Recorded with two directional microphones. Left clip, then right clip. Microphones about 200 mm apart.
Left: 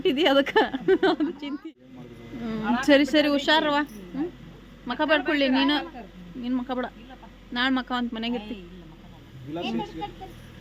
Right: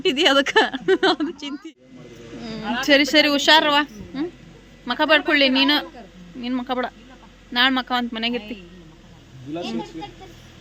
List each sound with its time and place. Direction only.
0.0 s a woman's voice: centre (ahead or behind)
2.4 s a woman's voice: 20° left (ahead or behind)
2.8 s a woman's voice: 5° left (ahead or behind)